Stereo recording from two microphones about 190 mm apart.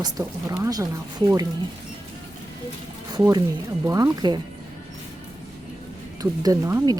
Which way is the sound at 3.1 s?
20° right (ahead or behind).